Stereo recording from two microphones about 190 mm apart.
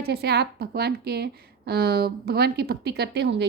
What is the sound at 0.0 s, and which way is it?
A woman's voice, 60° right (ahead or behind).